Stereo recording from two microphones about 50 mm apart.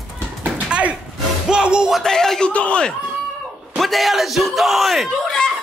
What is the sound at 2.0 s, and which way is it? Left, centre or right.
Speech, centre.